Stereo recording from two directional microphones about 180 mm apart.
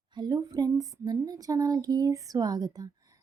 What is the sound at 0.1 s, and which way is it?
Speech, 20° right (ahead or behind).